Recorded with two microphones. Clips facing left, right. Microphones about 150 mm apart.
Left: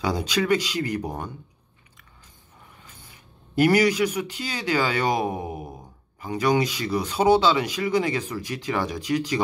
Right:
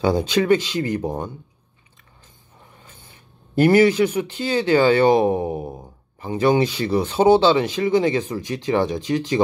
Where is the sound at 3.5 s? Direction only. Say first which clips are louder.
Right 5 dB; 30° right (ahead or behind).